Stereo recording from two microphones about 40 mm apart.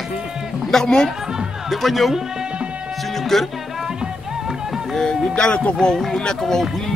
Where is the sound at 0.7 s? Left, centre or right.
Centre.